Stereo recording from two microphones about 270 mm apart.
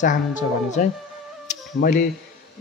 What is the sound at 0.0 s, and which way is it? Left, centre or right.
A man's voice, left.